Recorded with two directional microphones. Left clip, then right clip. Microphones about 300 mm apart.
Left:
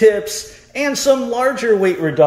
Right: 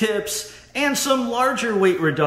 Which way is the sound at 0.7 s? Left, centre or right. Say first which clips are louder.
Left 5 dB; centre.